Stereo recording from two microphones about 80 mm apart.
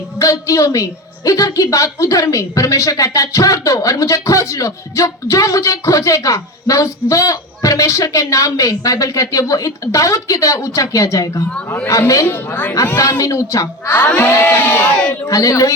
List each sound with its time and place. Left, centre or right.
0.2 s a woman's voice: left
12.3 s speech: left
13.0 s a woman's voice: left
13.8 s speech: left
14.2 s speech: left
14.4 s speech: left
15.3 s a woman's voice: left